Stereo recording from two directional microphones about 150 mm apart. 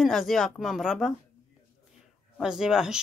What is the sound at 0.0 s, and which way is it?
Speech, centre (ahead or behind).